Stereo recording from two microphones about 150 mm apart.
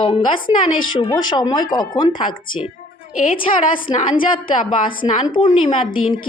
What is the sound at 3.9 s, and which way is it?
A woman's voice, 35° left (ahead or behind).